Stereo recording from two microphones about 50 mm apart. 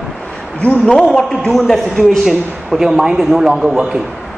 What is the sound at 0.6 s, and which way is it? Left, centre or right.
Speech, left.